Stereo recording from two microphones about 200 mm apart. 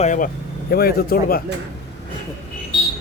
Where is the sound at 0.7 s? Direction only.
50° left (ahead or behind).